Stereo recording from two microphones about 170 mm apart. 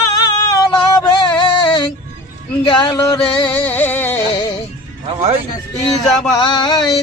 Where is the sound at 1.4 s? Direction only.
25° left (ahead or behind).